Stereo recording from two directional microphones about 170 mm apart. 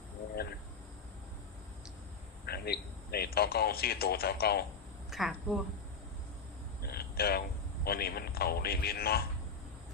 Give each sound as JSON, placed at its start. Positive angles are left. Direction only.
{"t": 2.5, "sound": "speech", "side_deg": 65}
{"t": 5.1, "sound": "a woman's voice", "side_deg": 0}
{"t": 6.8, "sound": "a sound", "side_deg": 65}
{"t": 7.9, "sound": "a man's voice", "side_deg": 65}